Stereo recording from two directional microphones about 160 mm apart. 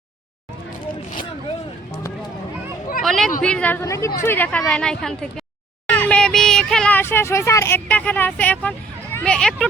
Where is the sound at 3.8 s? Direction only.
20° left (ahead or behind).